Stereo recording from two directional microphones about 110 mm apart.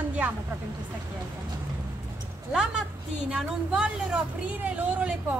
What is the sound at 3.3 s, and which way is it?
Speech, 5° right (ahead or behind).